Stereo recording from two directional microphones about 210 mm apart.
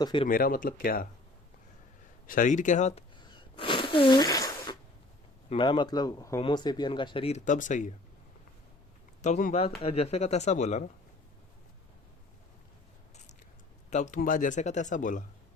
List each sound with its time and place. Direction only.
0.0 s speech: 25° left (ahead or behind)
0.3 s speech: 40° left (ahead or behind)
2.2 s speech: 40° left (ahead or behind)
3.5 s a sound: 25° left (ahead or behind)
5.5 s speech: 25° left (ahead or behind)
9.2 s speech: 35° left (ahead or behind)
13.9 s speech: 35° left (ahead or behind)